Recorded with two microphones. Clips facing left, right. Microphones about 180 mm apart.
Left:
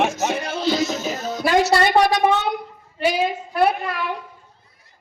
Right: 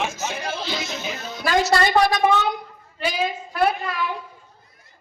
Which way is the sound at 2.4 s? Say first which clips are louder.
Left 1 dB; 65° left (ahead or behind).